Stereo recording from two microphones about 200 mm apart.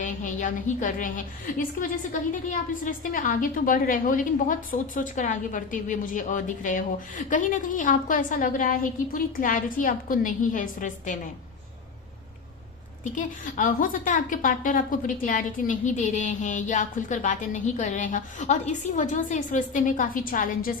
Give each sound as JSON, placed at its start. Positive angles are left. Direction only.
{"t": 0.0, "sound": "a woman's voice", "side_deg": 40}
{"t": 13.1, "sound": "a woman's voice", "side_deg": 40}